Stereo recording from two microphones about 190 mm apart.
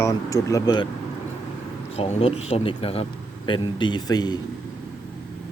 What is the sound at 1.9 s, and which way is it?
Speech, 30° left (ahead or behind).